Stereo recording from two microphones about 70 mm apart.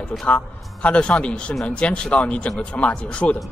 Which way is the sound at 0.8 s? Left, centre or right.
Centre.